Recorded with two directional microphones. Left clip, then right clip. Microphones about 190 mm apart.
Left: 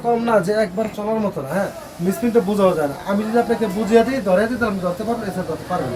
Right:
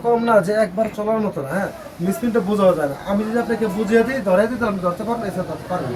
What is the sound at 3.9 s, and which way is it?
Speech, 10° left (ahead or behind).